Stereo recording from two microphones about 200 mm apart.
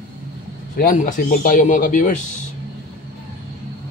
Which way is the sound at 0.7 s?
40° left (ahead or behind).